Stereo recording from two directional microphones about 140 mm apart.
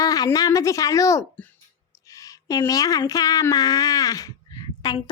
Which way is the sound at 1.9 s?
25° left (ahead or behind).